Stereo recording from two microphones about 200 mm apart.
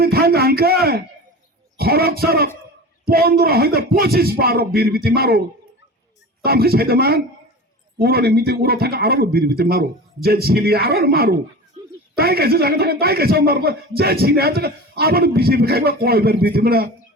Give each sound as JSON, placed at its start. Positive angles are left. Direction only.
{"t": 0.0, "sound": "speech", "side_deg": -50}
{"t": 1.8, "sound": "a man's voice", "side_deg": -50}
{"t": 6.4, "sound": "a man's voice", "side_deg": -50}